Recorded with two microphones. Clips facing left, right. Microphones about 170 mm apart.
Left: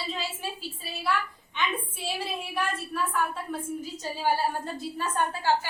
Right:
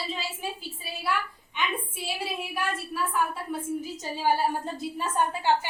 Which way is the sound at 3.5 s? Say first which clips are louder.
Right 2 dB; 15° right (ahead or behind).